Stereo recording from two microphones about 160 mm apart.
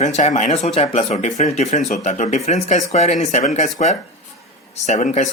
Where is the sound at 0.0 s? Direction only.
45° left (ahead or behind).